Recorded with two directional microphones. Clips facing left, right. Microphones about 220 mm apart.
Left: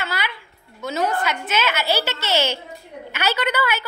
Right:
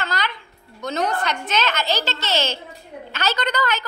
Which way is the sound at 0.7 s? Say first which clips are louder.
Left 1 dB; 5° left (ahead or behind).